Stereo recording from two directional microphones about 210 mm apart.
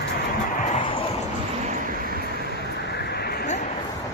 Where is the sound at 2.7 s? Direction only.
55° left (ahead or behind).